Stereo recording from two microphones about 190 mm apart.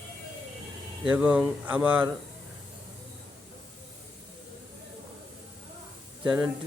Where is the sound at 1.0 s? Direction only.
5° right (ahead or behind).